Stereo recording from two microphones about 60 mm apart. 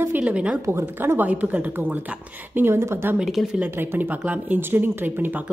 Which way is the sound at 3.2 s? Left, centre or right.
Centre.